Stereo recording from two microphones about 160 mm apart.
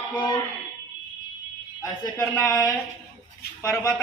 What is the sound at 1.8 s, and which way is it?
A man's voice, 20° left (ahead or behind).